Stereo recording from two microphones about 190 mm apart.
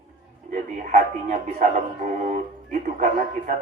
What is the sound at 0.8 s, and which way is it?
Speech, 40° right (ahead or behind).